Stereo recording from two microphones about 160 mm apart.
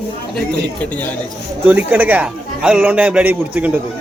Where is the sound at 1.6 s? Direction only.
10° right (ahead or behind).